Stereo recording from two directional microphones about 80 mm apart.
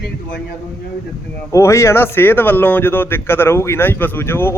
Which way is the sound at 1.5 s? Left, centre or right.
Left.